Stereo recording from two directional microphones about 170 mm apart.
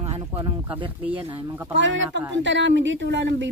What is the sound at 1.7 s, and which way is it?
A woman's voice, 90° right.